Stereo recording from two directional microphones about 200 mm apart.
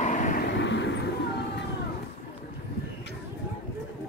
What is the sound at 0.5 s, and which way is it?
Vehicle, 60° left (ahead or behind).